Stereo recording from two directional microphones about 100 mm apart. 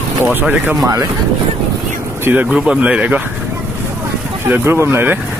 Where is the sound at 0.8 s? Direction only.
40° right (ahead or behind).